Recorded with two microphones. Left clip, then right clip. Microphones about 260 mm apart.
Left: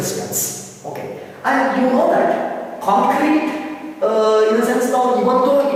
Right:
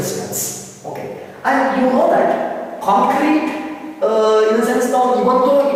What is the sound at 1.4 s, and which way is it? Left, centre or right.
A woman's voice, centre.